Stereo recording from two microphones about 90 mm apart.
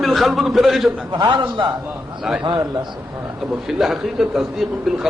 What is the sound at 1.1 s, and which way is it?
Speech, 55° right (ahead or behind).